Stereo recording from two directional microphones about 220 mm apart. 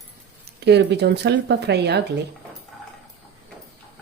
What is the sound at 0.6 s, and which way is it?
Speech, 50° right (ahead or behind).